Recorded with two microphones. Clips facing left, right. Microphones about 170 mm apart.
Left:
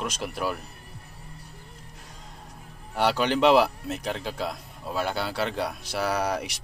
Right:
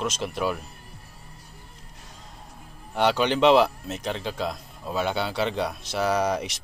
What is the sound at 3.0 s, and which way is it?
Speech, 5° left (ahead or behind).